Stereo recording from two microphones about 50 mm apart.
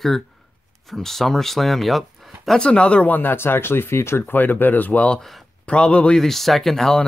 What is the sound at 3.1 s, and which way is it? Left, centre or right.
Speech, left.